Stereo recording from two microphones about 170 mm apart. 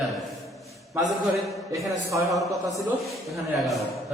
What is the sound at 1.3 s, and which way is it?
Speech, centre (ahead or behind).